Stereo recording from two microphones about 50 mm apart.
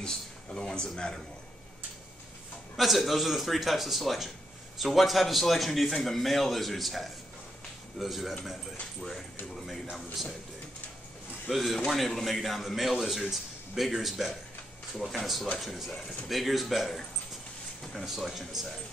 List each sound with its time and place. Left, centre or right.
0.0 s speech: centre
2.8 s a man's voice: centre
11.5 s a man's voice: centre